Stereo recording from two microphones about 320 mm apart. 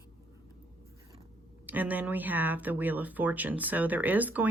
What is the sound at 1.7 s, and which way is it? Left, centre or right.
Speech, centre.